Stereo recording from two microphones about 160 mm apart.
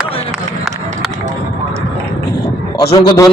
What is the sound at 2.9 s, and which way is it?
Speech, 25° left (ahead or behind).